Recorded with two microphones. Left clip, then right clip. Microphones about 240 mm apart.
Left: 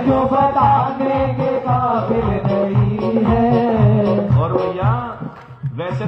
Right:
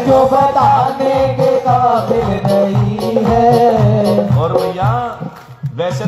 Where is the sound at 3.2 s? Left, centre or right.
Right.